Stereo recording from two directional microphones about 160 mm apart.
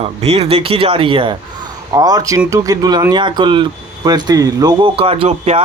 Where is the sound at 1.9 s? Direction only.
25° right (ahead or behind).